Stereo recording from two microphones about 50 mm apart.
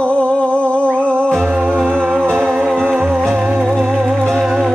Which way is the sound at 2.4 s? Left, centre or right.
Right.